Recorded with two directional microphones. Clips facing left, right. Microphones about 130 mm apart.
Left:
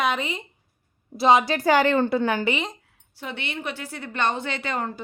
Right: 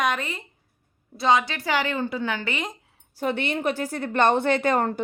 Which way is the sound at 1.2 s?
30° left (ahead or behind).